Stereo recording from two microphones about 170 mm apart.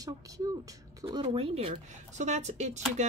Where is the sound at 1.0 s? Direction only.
35° right (ahead or behind).